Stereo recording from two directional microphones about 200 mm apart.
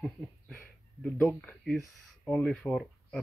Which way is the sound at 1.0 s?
5° left (ahead or behind).